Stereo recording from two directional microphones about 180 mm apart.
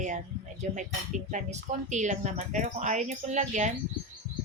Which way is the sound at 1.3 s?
40° right (ahead or behind).